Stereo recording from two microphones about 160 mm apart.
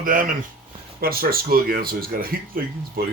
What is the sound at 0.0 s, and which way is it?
Speech, 60° right (ahead or behind).